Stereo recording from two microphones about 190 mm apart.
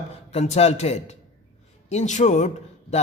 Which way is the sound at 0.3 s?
35° left (ahead or behind).